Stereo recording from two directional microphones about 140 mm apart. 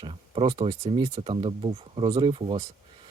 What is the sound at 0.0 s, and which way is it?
Speech, 40° right (ahead or behind).